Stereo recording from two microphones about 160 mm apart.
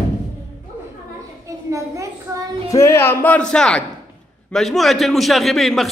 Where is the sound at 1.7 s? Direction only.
20° right (ahead or behind).